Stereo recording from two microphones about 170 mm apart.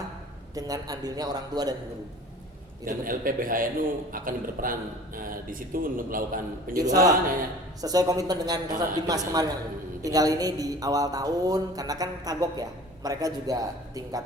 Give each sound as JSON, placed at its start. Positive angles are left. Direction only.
{"t": 0.5, "sound": "mantra", "side_deg": -20}
{"t": 2.8, "sound": "a man's voice", "side_deg": -55}
{"t": 6.9, "sound": "mantra", "side_deg": -20}